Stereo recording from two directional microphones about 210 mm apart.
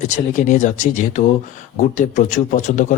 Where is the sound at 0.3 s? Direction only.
35° left (ahead or behind).